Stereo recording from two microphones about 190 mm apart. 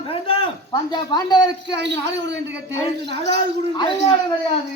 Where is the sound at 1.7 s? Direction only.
65° right (ahead or behind).